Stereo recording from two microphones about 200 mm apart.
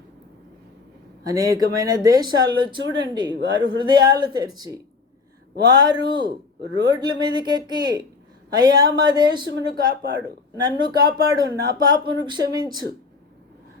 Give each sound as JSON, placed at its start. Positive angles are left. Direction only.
{"t": 1.3, "sound": "speech", "side_deg": -15}
{"t": 9.9, "sound": "speech", "side_deg": -55}
{"t": 10.2, "sound": "speech", "side_deg": -20}